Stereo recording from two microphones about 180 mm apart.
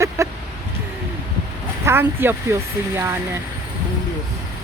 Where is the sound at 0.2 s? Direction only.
15° right (ahead or behind).